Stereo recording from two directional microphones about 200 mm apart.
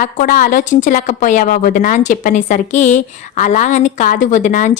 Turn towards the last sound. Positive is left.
turn(degrees=40)  # may be behind; listen again after turning